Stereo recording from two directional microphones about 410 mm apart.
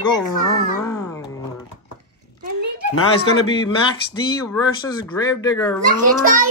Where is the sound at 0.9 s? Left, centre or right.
Centre.